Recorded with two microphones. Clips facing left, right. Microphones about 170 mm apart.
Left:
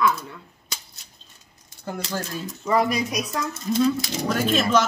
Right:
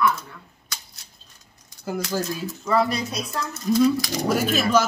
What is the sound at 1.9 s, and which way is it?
Speech, 5° right (ahead or behind).